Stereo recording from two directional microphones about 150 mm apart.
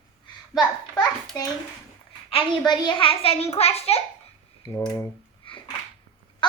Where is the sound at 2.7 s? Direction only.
30° left (ahead or behind).